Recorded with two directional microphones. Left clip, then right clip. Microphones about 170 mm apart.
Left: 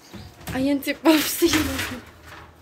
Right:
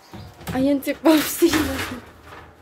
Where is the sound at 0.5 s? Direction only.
15° right (ahead or behind).